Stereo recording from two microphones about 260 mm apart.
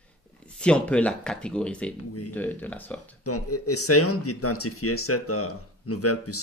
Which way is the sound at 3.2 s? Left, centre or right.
Left.